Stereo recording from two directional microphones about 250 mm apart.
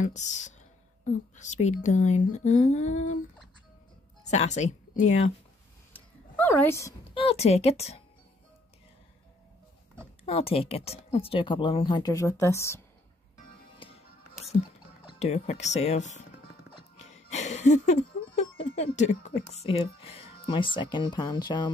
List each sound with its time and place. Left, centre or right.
0.0 s speech: left
4.3 s speech: left
5.9 s a sound: centre
7.2 s speech: left
10.2 s speech: left
13.7 s music: left
15.0 s speech: left
16.7 s a sound: left
18.9 s speech: left